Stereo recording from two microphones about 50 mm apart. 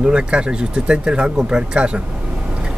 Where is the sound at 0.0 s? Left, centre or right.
Centre.